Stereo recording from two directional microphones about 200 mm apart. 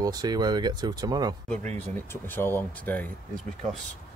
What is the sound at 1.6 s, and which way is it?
Speech, 35° right (ahead or behind).